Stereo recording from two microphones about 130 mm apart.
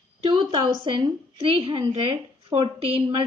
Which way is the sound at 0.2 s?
35° right (ahead or behind).